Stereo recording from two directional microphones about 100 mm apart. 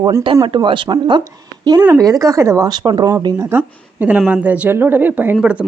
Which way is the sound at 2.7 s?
45° right (ahead or behind).